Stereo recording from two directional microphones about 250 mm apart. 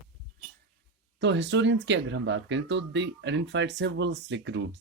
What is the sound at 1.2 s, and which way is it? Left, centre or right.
Speech, right.